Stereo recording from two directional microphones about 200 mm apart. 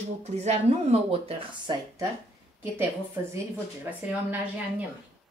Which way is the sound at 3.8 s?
10° right (ahead or behind).